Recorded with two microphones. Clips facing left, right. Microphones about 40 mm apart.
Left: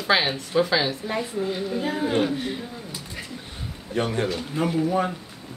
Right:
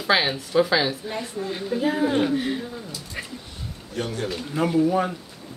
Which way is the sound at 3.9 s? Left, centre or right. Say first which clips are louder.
Left 4 dB; left.